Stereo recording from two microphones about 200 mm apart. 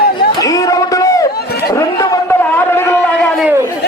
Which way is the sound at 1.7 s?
15° left (ahead or behind).